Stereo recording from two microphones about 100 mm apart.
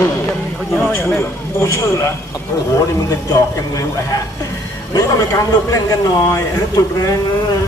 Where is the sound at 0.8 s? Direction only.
25° left (ahead or behind).